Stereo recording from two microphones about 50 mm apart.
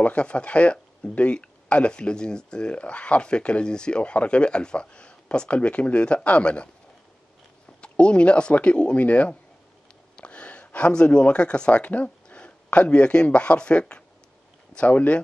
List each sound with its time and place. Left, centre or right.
0.0 s speech: left
7.8 s speech: left
11.8 s a sound: left
12.6 s speech: left